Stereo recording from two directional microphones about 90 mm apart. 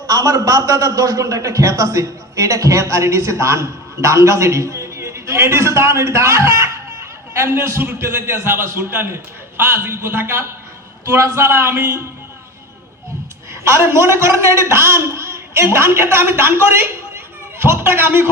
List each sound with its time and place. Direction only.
0.1 s a man's voice: 40° right (ahead or behind)
13.5 s a man's voice: 30° right (ahead or behind)